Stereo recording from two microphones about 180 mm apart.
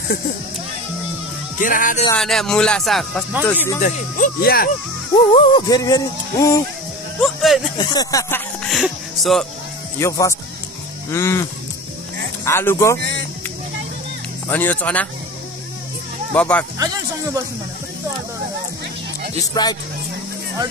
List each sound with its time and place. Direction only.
1.6 s speech: 50° left (ahead or behind)
2.1 s speech: 5° left (ahead or behind)
3.8 s speech: 50° left (ahead or behind)
5.1 s speech: 25° left (ahead or behind)
7.2 s speech: centre (ahead or behind)
7.7 s speech: 25° left (ahead or behind)
8.6 s speech: centre (ahead or behind)
9.9 s speech: 15° left (ahead or behind)
12.4 s speech: 15° left (ahead or behind)
14.5 s speech: 10° left (ahead or behind)
16.3 s speech: 5° left (ahead or behind)
16.7 s speech: 20° right (ahead or behind)
19.4 s speech: 25° left (ahead or behind)